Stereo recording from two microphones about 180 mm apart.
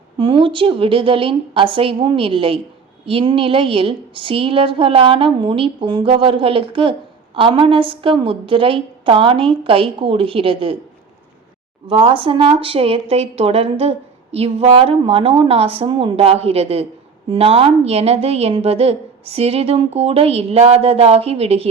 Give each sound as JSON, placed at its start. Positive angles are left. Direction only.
{"t": 0.2, "sound": "a woman's voice", "side_deg": -25}
{"t": 11.9, "sound": "a woman's voice", "side_deg": -30}